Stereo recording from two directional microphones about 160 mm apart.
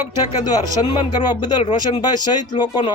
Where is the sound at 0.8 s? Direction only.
40° left (ahead or behind).